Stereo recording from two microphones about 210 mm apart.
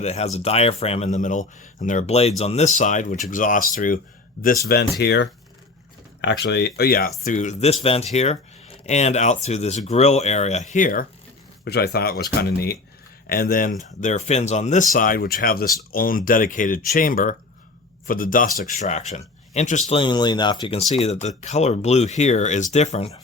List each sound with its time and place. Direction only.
0.0 s speech: 30° left (ahead or behind); by 5.3 s 55° left (ahead or behind)
6.4 s speech: 50° left (ahead or behind)
7.3 s speech: 35° left (ahead or behind)
11.6 s speech: 50° left (ahead or behind); by 19.8 s 35° left (ahead or behind)
19.9 s speech: 25° left (ahead or behind)